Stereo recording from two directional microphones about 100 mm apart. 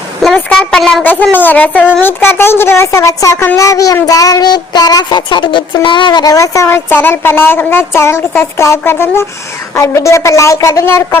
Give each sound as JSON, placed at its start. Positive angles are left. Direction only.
{"t": 0.3, "sound": "a sound", "side_deg": 15}
{"t": 0.8, "sound": "speech", "side_deg": 0}
{"t": 1.0, "sound": "a woman's voice", "side_deg": 15}
{"t": 3.4, "sound": "child singing", "side_deg": 30}
{"t": 9.7, "sound": "a woman's voice", "side_deg": 30}